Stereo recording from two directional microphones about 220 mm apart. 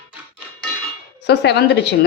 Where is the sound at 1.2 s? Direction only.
50° left (ahead or behind).